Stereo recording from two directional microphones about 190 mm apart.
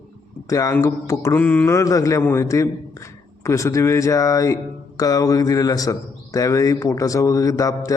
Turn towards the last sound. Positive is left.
turn(degrees=15)  # may be behind; listen again after turning